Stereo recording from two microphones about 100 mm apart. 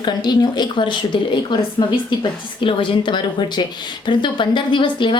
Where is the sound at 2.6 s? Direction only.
55° left (ahead or behind).